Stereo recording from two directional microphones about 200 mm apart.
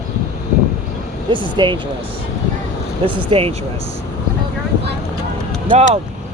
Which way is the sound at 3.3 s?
30° right (ahead or behind).